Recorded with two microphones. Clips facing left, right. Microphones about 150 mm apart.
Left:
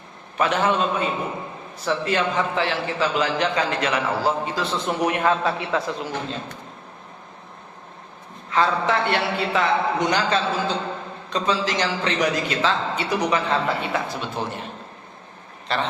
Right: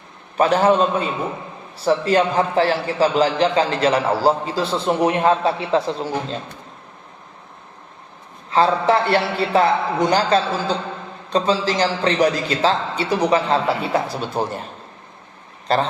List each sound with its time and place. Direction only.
0.3 s a man's voice: 35° right (ahead or behind)
8.4 s a man's voice: 30° right (ahead or behind)
15.6 s speech: 40° right (ahead or behind)